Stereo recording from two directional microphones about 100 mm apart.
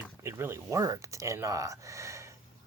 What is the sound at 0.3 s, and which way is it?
Speech, 25° right (ahead or behind).